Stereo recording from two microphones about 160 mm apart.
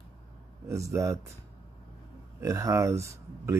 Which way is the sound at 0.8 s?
20° right (ahead or behind).